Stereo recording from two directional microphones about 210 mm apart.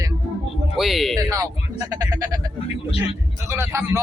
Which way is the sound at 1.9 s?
20° right (ahead or behind).